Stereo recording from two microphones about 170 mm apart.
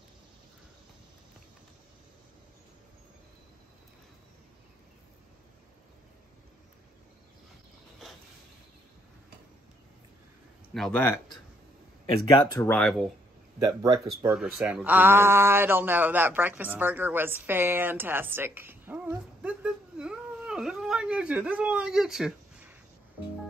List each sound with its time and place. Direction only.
10.7 s speech: 5° left (ahead or behind)
12.5 s speech: 10° left (ahead or behind)
13.6 s speech: 20° right (ahead or behind)
14.4 s speech: 5° right (ahead or behind)